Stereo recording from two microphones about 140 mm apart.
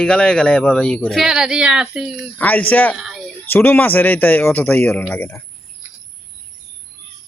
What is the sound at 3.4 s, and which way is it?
A man's voice, 15° left (ahead or behind).